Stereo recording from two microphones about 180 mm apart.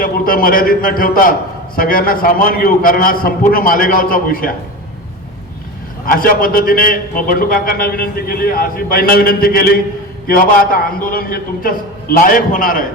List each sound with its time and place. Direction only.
0.0 s a man's voice: 55° left (ahead or behind)
6.1 s a man's voice: 50° left (ahead or behind)